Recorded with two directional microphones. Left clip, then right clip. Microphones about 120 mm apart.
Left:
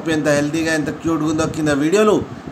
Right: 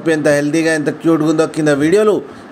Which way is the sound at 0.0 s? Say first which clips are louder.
Right 4 dB; 45° right (ahead or behind).